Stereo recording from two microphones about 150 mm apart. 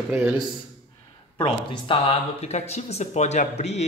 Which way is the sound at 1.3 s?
35° left (ahead or behind).